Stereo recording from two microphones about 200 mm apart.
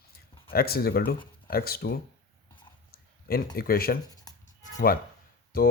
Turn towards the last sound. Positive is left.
turn(degrees=50)  # may be behind; listen again after turning